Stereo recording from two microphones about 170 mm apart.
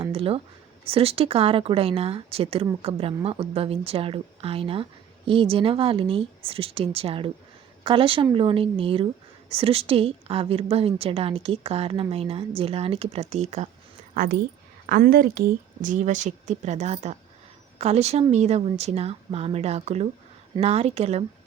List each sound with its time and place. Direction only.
0.1 s a woman's voice: 35° right (ahead or behind)
14.1 s a woman's voice: 55° right (ahead or behind); by 21.2 s 40° right (ahead or behind)